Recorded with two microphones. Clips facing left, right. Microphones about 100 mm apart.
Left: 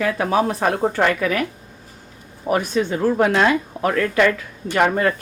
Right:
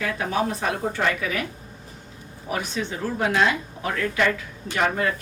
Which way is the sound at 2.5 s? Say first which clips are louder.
Left 8 dB; 50° left (ahead or behind).